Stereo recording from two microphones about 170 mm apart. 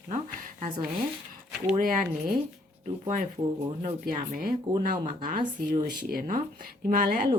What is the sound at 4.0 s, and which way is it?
Speech, 55° right (ahead or behind).